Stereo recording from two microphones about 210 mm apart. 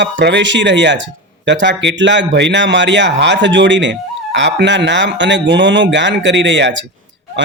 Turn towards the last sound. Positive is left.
turn(degrees=-60)  # may be behind; listen again after turning